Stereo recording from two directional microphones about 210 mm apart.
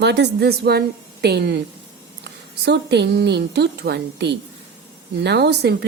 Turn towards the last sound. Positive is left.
turn(degrees=-50)  # may be behind; listen again after turning